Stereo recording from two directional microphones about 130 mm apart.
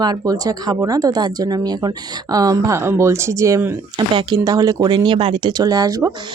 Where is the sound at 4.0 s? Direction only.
35° right (ahead or behind).